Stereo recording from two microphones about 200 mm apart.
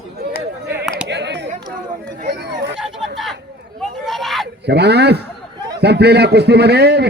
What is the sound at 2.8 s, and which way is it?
Chatter, centre (ahead or behind).